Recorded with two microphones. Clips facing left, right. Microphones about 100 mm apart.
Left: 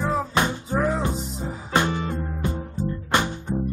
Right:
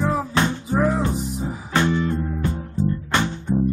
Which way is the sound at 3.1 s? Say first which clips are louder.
Left 3 dB; 15° left (ahead or behind).